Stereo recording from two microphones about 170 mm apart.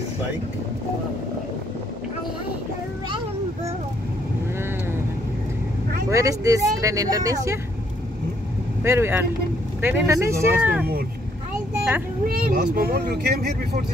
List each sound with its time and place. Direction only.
6.0 s speech: 20° right (ahead or behind)
8.8 s speech: 15° right (ahead or behind)
12.3 s speech: 65° right (ahead or behind)